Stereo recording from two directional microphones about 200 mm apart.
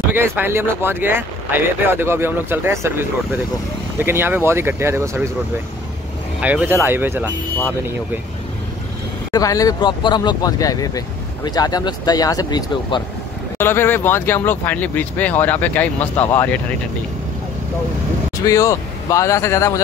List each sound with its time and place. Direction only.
0.1 s speech: 10° right (ahead or behind)
6.4 s speech: 10° right (ahead or behind)
9.3 s speech: 15° left (ahead or behind)
18.4 s speech: 15° left (ahead or behind)